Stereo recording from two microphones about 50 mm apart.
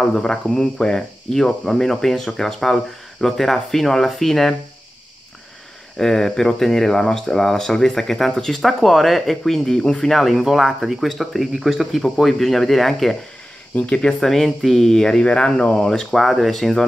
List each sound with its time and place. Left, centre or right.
0.1 s speech: centre
5.9 s speech: centre
13.7 s speech: centre
14.2 s speech: centre
15.8 s speech: centre